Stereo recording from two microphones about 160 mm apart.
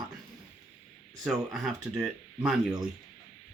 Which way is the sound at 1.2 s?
5° right (ahead or behind).